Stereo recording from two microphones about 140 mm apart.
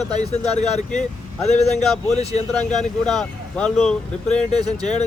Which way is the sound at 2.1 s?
50° left (ahead or behind).